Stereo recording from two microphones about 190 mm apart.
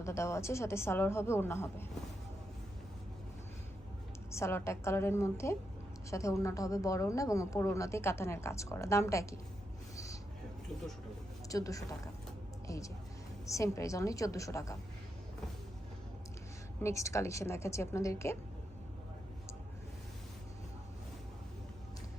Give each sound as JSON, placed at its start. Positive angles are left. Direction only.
{"t": 0.0, "sound": "speech", "side_deg": 15}
{"t": 4.3, "sound": "speech", "side_deg": 15}
{"t": 11.4, "sound": "speech", "side_deg": 15}
{"t": 16.8, "sound": "speech", "side_deg": 15}